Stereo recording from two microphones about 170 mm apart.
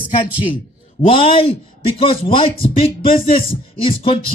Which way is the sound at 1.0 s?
35° left (ahead or behind).